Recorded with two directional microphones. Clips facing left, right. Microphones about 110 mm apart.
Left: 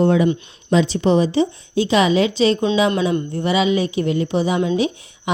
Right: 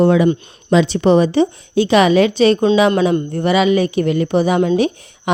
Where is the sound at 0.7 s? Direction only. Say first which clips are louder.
Right 4 dB; 75° right (ahead or behind).